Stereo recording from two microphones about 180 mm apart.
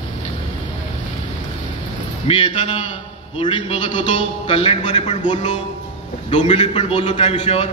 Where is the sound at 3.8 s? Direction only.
40° left (ahead or behind).